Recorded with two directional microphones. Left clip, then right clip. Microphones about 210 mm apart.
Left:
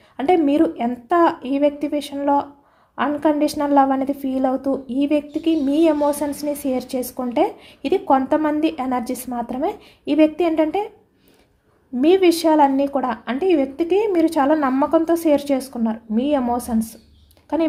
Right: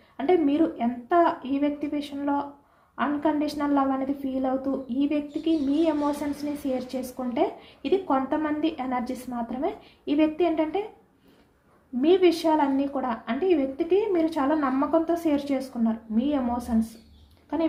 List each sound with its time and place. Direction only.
0.2 s a woman's voice: 55° left (ahead or behind)
11.9 s a woman's voice: 55° left (ahead or behind)